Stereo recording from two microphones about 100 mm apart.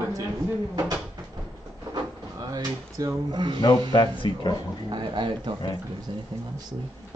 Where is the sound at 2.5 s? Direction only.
40° right (ahead or behind).